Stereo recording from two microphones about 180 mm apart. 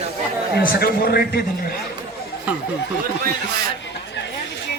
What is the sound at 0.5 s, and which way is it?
Speech, 60° left (ahead or behind).